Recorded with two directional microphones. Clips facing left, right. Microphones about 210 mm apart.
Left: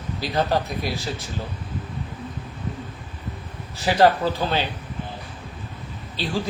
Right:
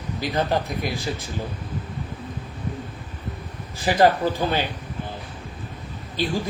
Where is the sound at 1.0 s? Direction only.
55° right (ahead or behind).